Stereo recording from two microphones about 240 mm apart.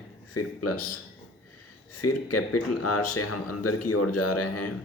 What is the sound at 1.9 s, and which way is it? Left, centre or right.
Speech, left.